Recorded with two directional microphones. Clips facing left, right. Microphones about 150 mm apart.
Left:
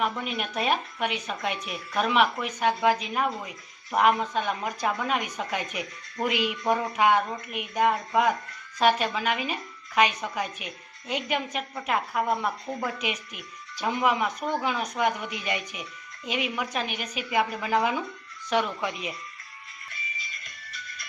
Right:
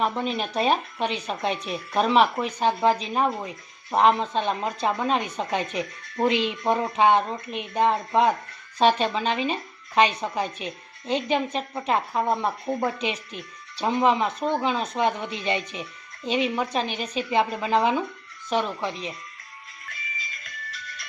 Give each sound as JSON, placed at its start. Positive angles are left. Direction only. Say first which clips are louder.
{"t": 0.0, "sound": "a woman's voice", "louder": "right 4 dB", "side_deg": -30}
{"t": 20.7, "sound": "music", "louder": "even", "side_deg": -90}